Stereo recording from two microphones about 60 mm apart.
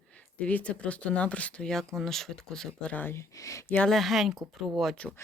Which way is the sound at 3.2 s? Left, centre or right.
Left.